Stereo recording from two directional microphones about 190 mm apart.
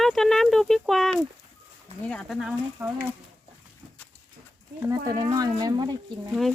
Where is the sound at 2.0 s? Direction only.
5° left (ahead or behind).